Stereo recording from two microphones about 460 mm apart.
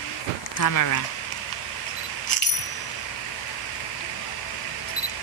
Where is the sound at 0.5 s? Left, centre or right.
Left.